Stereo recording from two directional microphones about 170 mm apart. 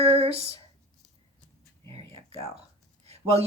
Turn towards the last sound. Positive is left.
turn(degrees=-35)  # may be behind; listen again after turning